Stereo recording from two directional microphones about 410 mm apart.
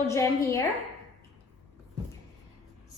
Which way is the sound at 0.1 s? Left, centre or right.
Centre.